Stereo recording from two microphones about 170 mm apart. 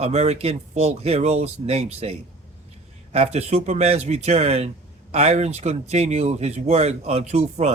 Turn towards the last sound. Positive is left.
turn(degrees=-40)  # may be behind; listen again after turning